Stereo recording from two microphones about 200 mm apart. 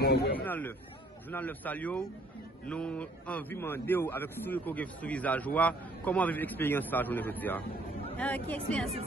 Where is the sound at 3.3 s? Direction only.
10° left (ahead or behind).